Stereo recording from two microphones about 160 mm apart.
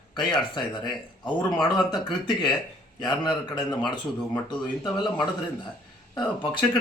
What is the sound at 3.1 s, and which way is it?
A man's voice, 30° left (ahead or behind).